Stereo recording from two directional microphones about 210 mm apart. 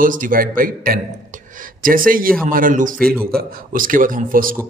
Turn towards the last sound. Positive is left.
turn(degrees=-40)  # may be behind; listen again after turning